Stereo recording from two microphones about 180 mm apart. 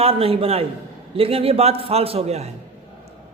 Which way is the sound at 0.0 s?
30° right (ahead or behind).